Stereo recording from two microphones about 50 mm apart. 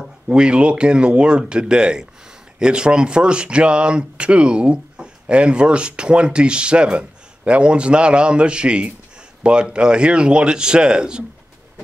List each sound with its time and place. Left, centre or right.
0.3 s speech: centre